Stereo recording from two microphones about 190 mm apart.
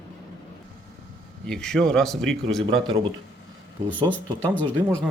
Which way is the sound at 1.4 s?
5° left (ahead or behind).